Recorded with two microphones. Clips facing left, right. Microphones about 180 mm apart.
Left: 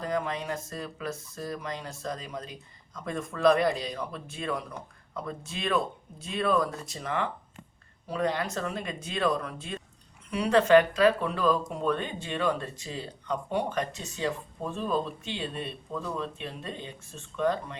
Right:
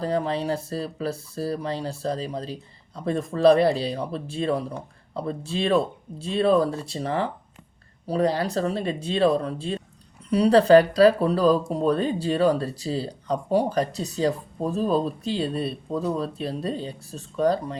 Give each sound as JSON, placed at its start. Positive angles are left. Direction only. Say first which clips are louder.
{"t": 0.0, "sound": "speech", "louder": "right 6 dB", "side_deg": -30}